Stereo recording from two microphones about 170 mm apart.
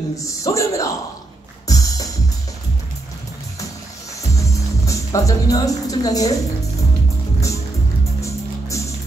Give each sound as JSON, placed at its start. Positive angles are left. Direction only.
{"t": 0.4, "sound": "a man's voice", "side_deg": 20}
{"t": 1.7, "sound": "music", "side_deg": 20}
{"t": 4.4, "sound": "music", "side_deg": 20}
{"t": 7.3, "sound": "music", "side_deg": 20}